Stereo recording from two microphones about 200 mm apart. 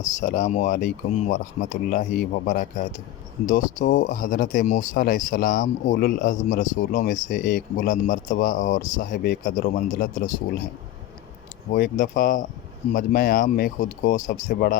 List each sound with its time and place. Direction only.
0.0 s speech: 40° left (ahead or behind)
11.7 s speech: 40° left (ahead or behind)